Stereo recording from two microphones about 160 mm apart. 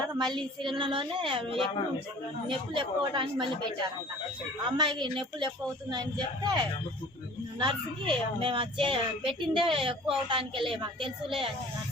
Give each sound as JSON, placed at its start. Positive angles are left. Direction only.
{"t": 0.1, "sound": "a child's voice", "side_deg": -25}
{"t": 4.6, "sound": "a woman's voice", "side_deg": -30}